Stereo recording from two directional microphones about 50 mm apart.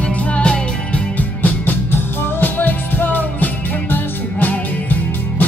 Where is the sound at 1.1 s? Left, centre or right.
Left.